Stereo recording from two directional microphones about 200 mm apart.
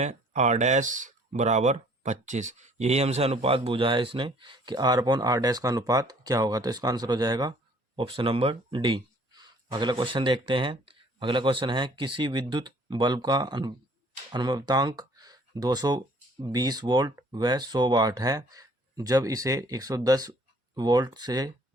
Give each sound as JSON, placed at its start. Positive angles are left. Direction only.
{"t": 0.0, "sound": "speech", "side_deg": -35}